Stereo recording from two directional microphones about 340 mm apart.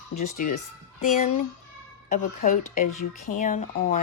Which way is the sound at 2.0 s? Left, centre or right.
Left.